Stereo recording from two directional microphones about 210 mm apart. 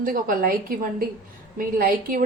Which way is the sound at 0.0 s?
40° right (ahead or behind).